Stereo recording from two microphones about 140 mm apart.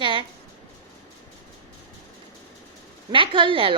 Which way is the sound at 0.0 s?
35° right (ahead or behind).